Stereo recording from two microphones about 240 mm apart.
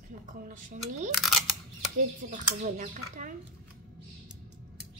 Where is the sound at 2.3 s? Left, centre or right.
Right.